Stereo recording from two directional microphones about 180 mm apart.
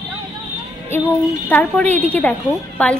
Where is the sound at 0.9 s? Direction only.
10° left (ahead or behind).